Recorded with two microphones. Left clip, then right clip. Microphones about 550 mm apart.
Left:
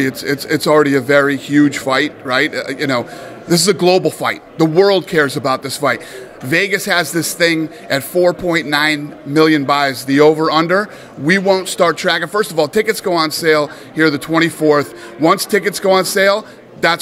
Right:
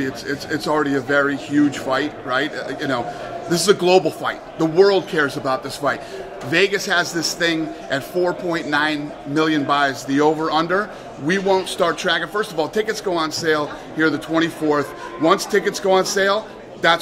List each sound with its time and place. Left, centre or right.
0.0 s a man's voice: left